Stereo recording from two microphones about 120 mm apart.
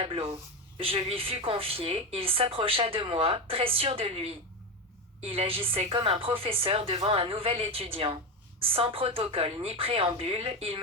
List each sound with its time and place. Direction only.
0.0 s a woman's voice: 55° right (ahead or behind)